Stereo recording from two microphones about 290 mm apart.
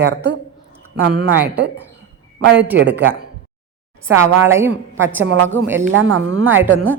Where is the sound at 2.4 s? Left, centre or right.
Right.